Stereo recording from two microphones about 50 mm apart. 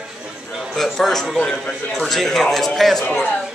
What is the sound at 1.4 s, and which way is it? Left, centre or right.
Speech, centre.